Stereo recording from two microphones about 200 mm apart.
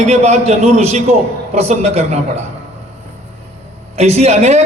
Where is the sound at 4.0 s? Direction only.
30° right (ahead or behind).